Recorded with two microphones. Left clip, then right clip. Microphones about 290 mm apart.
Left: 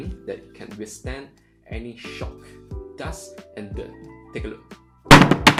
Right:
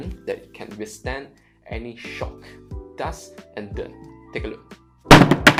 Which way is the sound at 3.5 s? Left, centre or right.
Right.